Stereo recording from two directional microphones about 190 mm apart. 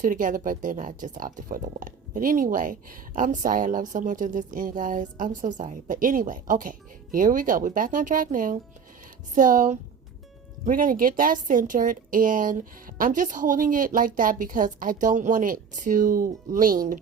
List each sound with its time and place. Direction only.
0.0 s speech: 45° right (ahead or behind)